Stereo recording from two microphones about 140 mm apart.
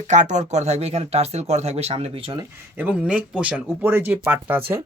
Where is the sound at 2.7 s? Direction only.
10° right (ahead or behind).